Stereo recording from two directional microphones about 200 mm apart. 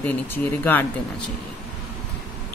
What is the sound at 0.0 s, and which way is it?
A woman's voice, 10° left (ahead or behind).